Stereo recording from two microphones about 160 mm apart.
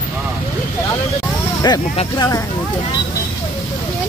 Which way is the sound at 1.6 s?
25° left (ahead or behind).